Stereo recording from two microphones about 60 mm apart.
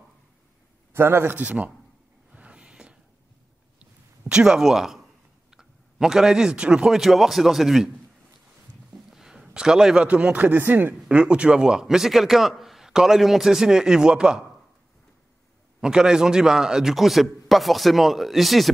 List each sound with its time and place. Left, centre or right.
0.9 s a man's voice: right
1.3 s speech: right
2.3 s a sound: centre
4.6 s a man's voice: centre
6.9 s a man's voice: centre
9.1 s a sound: centre
10.0 s speech: right
11.1 s a man's voice: centre
15.8 s a man's voice: centre